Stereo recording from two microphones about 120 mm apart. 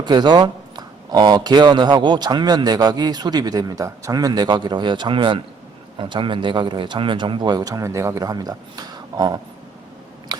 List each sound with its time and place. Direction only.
0.0 s a man's voice: 40° right (ahead or behind)